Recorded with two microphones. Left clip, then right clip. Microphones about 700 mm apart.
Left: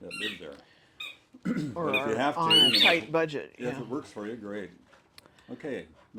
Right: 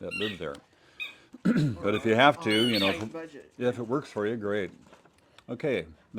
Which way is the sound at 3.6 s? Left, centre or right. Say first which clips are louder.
Right 10 dB; right.